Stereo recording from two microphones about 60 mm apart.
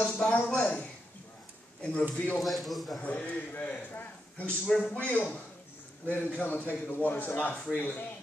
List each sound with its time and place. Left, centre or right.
0.2 s a man's voice: centre
2.3 s a man's voice: centre
3.0 s a man's voice: left
4.6 s a man's voice: centre
4.9 s a man's voice: left